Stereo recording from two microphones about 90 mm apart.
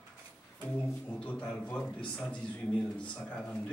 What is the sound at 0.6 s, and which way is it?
A man's voice, 15° left (ahead or behind).